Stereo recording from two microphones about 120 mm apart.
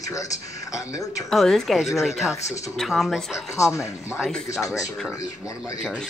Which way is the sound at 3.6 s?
25° left (ahead or behind).